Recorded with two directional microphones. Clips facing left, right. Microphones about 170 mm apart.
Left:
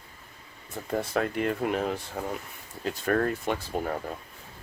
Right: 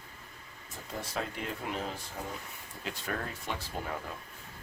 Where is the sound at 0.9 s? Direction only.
60° left (ahead or behind).